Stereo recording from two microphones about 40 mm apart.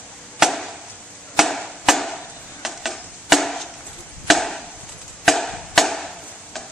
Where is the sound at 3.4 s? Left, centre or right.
Centre.